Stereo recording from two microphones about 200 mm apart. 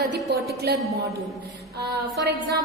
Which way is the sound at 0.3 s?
55° right (ahead or behind).